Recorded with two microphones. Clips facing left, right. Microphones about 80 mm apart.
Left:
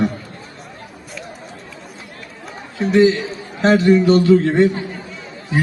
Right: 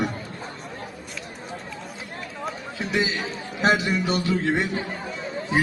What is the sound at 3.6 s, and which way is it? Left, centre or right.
A man's voice, centre.